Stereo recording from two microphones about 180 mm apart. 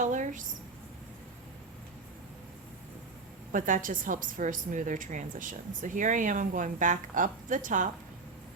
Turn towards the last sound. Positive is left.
turn(degrees=-45)  # may be behind; listen again after turning